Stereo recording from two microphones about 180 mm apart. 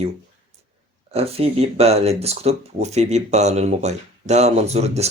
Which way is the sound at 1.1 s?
35° right (ahead or behind).